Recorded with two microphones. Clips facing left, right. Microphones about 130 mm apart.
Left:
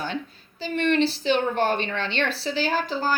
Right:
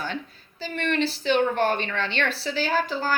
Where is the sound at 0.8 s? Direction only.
45° right (ahead or behind).